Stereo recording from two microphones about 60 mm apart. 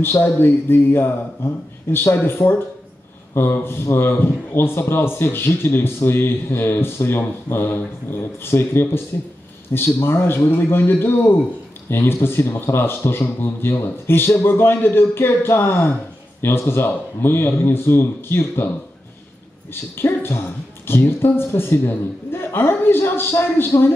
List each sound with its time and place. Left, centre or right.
0.0 s a man's voice: left
3.3 s a man's voice: left
19.7 s a man's voice: left